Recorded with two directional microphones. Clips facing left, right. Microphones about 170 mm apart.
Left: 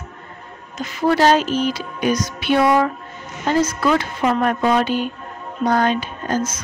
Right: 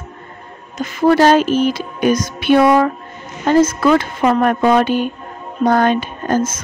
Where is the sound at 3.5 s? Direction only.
55° right (ahead or behind).